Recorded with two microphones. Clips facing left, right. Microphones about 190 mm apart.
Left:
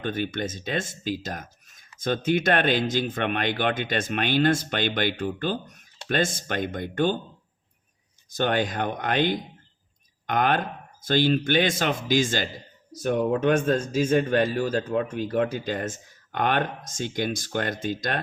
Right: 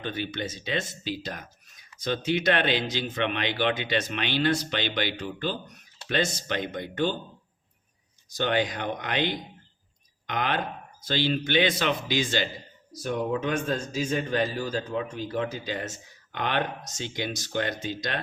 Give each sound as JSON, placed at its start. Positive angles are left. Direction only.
{"t": 0.0, "sound": "speech", "side_deg": 50}
{"t": 8.4, "sound": "speech", "side_deg": 50}